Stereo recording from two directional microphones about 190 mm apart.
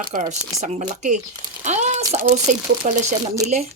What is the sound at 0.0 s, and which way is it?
Speech, 45° right (ahead or behind).